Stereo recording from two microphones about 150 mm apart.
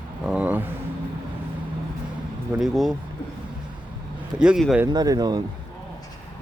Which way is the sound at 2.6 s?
Centre (ahead or behind).